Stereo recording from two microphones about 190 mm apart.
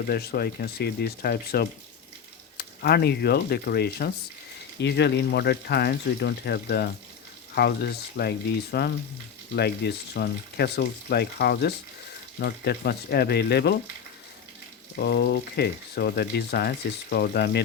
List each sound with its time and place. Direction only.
0.1 s speech: 55° left (ahead or behind)
14.9 s speech: 60° left (ahead or behind)